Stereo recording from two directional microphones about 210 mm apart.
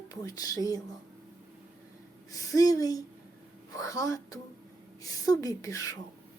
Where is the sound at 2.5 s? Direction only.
15° left (ahead or behind).